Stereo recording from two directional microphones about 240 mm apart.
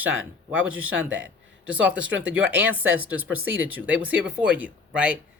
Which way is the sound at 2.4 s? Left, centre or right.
Centre.